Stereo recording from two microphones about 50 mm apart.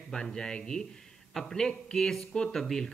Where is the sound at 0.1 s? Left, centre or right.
Centre.